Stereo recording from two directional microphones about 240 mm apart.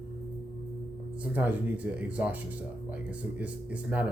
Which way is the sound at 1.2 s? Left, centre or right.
Centre.